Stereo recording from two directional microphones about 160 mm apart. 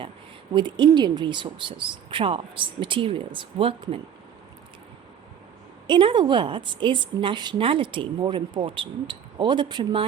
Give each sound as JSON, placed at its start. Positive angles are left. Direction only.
{"t": 0.5, "sound": "a woman's voice", "side_deg": -30}
{"t": 5.9, "sound": "a woman's voice", "side_deg": -30}